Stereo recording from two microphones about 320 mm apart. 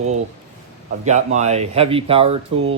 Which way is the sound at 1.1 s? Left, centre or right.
Right.